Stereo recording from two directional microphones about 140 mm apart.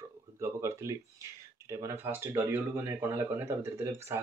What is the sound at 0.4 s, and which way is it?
Speech, 20° right (ahead or behind).